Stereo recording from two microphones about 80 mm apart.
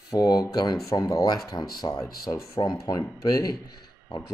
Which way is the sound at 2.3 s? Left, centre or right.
Left.